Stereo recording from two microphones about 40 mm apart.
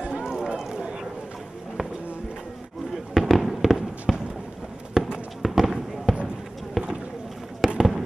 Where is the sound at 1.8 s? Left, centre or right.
Right.